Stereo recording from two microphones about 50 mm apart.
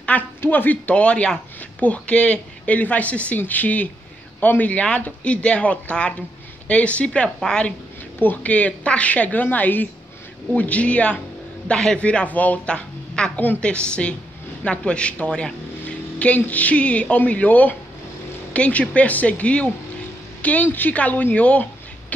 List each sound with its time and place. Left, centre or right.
0.4 s a woman's voice: left
7.5 s a man's voice: centre
8.2 s a woman's voice: left
12.7 s a sound: centre
13.6 s a woman's voice: left